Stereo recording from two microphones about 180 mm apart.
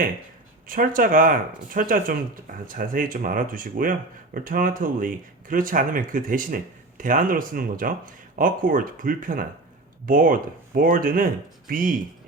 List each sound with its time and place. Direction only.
0.7 s speech: 50° right (ahead or behind)